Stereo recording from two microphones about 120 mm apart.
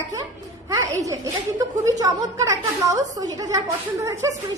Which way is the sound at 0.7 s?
30° right (ahead or behind).